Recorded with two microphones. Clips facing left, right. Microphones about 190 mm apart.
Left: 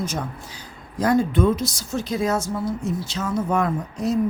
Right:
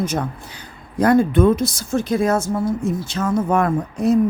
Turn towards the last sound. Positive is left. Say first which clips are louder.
# right 5 dB
turn(degrees=-55)  # may be behind; listen again after turning